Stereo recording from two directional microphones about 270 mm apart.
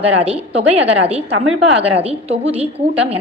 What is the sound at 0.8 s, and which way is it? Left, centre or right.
A woman's voice, right.